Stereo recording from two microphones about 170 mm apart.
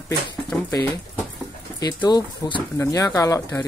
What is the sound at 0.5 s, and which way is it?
Speech, 15° left (ahead or behind).